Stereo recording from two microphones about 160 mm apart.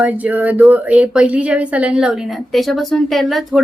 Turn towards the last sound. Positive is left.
turn(degrees=0)  # may be behind; listen again after turning